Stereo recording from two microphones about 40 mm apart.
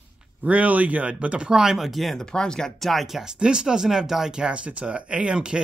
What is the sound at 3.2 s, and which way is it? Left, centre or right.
Speech, centre.